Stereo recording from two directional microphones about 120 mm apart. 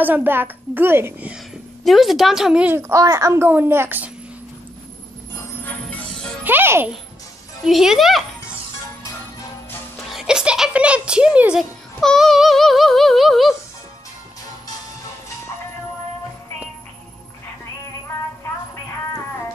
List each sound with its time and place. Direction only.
0.0 s a child's voice: 15° right (ahead or behind)
1.9 s a woman's voice: centre (ahead or behind)
2.7 s a child's voice: 25° right (ahead or behind)
5.3 s music: 15° left (ahead or behind)
6.4 s a child's voice: 15° right (ahead or behind)
7.6 s a woman's voice: 5° right (ahead or behind)
9.9 s speech: 5° right (ahead or behind)
12.0 s a sound: 5° left (ahead or behind)